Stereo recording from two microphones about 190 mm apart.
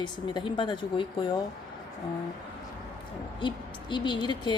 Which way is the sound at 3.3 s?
25° left (ahead or behind).